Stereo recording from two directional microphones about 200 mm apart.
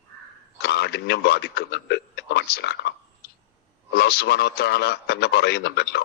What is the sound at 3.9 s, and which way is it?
A man's voice, 55° left (ahead or behind).